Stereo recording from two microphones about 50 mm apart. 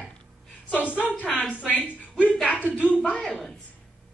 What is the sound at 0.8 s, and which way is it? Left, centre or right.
A woman's voice, left.